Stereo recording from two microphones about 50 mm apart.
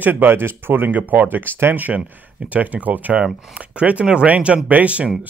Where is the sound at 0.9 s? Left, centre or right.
Right.